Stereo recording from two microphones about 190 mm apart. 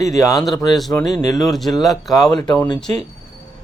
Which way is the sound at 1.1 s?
20° left (ahead or behind).